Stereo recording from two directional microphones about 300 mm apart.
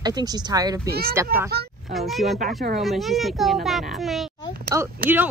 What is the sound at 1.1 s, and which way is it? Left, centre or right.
A child's voice, centre.